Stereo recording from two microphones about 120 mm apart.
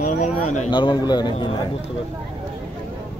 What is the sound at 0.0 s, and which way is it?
Speech, 85° left.